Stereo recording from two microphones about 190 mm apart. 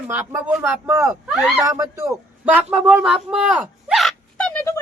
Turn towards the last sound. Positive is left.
turn(degrees=10)  # may be behind; listen again after turning